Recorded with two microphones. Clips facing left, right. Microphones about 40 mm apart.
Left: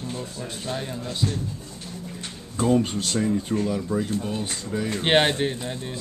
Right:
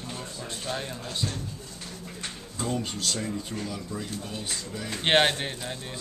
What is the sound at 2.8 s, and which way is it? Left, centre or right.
Speech, left.